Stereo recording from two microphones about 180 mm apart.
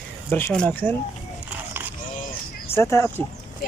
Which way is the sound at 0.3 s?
10° left (ahead or behind).